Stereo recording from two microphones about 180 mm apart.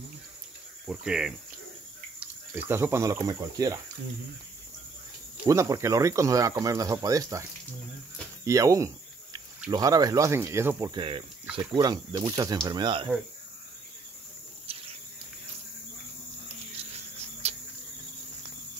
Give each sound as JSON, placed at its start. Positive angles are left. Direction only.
{"t": 0.8, "sound": "speech", "side_deg": -5}
{"t": 5.4, "sound": "speech", "side_deg": -15}
{"t": 8.5, "sound": "cricket", "side_deg": -20}
{"t": 9.7, "sound": "speech", "side_deg": -20}
{"t": 11.0, "sound": "speech", "side_deg": -30}
{"t": 14.7, "sound": "cricket", "side_deg": -35}
{"t": 16.7, "sound": "a sound", "side_deg": -35}